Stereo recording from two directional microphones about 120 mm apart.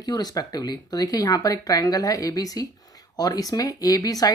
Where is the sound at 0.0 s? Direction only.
35° left (ahead or behind).